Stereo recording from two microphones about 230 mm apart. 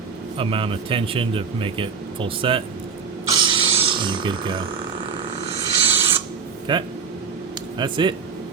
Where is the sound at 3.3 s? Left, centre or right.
Right.